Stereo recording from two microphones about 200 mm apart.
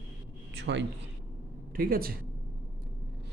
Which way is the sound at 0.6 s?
60° right (ahead or behind).